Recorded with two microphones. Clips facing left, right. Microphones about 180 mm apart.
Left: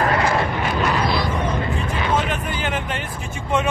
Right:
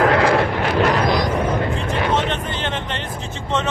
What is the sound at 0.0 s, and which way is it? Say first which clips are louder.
Vehicle: right 4 dB; 70° right (ahead or behind).